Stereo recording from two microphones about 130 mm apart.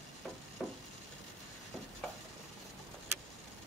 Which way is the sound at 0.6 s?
Centre (ahead or behind).